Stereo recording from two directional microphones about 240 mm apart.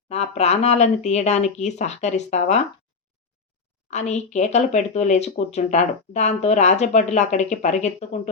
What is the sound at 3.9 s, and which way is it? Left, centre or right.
Speech, left.